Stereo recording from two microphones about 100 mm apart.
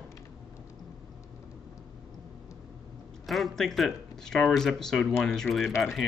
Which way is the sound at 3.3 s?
Centre (ahead or behind).